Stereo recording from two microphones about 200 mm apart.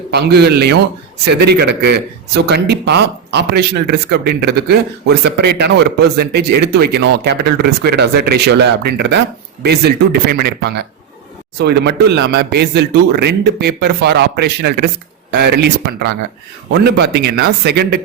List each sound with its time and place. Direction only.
0.1 s speech: 55° right (ahead or behind)